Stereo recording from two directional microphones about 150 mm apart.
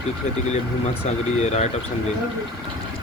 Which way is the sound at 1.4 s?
50° left (ahead or behind).